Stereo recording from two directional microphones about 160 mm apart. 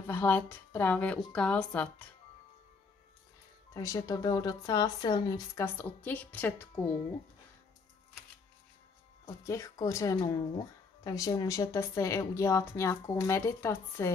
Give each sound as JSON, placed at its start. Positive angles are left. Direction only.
{"t": 0.0, "sound": "a woman's voice", "side_deg": 15}
{"t": 3.7, "sound": "speech", "side_deg": 20}
{"t": 5.8, "sound": "a woman's voice", "side_deg": 10}
{"t": 9.2, "sound": "speech", "side_deg": 20}